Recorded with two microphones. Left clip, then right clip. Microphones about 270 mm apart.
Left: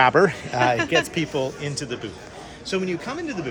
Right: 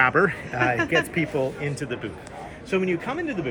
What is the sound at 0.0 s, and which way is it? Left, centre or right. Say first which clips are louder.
A man's voice: left 3 dB; left.